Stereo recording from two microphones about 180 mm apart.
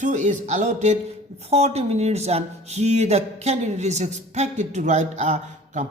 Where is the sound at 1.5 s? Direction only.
35° right (ahead or behind).